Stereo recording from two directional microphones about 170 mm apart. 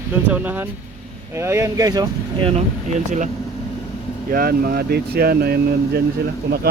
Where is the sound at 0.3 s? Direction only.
10° right (ahead or behind).